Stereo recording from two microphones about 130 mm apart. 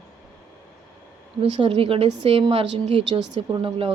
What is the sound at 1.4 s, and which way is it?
A woman's voice, 45° right (ahead or behind).